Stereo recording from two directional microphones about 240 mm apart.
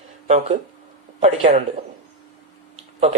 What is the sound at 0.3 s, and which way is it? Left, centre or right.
Speech, right.